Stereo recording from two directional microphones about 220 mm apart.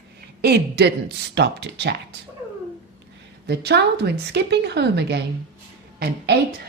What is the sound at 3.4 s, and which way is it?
Speech, 50° right (ahead or behind).